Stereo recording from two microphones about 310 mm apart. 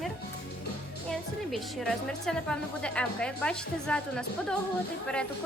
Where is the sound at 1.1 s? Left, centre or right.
Centre.